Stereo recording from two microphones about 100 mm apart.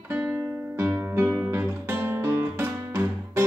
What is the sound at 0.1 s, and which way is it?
Music, 20° right (ahead or behind).